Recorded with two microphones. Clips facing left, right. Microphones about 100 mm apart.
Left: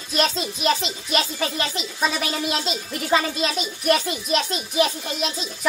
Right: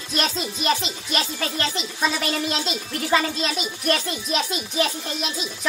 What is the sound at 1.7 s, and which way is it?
A woman's voice, 5° left (ahead or behind).